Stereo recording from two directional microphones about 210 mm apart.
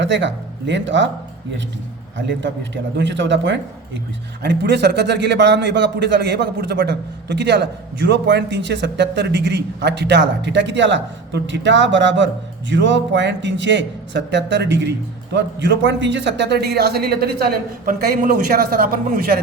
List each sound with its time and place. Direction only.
0.0 s speech: 60° right (ahead or behind)
2.1 s a man's voice: 60° right (ahead or behind)